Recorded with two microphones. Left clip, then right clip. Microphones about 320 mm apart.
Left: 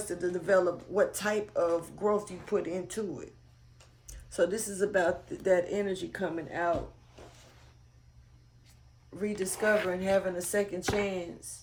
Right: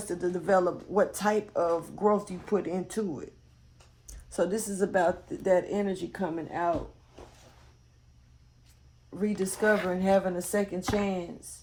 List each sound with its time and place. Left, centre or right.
0.0 s speech: centre
4.4 s speech: centre
9.1 s speech: centre